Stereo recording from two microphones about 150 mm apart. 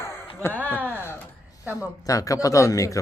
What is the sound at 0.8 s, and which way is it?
Speech, 10° right (ahead or behind).